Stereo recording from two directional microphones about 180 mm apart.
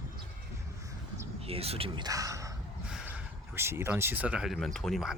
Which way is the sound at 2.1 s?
20° right (ahead or behind).